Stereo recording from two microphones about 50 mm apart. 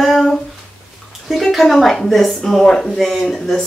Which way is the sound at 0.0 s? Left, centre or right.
Centre.